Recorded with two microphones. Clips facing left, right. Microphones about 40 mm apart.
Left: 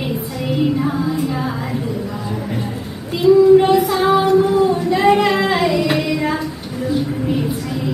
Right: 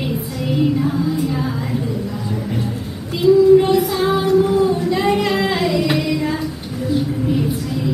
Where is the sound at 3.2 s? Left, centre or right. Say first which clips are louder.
Left 1 dB; left.